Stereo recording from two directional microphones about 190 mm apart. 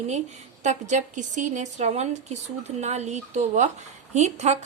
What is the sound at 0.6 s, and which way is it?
Speech, 40° right (ahead or behind).